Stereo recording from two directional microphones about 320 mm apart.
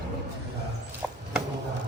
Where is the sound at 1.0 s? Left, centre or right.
Centre.